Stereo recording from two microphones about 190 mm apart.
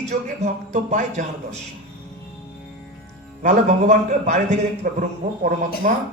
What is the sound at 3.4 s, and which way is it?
A man's voice, 40° right (ahead or behind).